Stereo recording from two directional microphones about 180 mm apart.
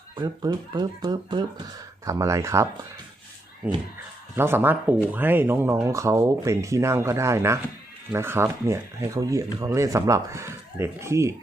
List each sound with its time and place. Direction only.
0.2 s speech: 25° right (ahead or behind)